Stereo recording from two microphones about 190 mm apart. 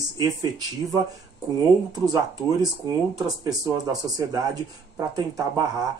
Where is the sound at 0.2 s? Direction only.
20° right (ahead or behind).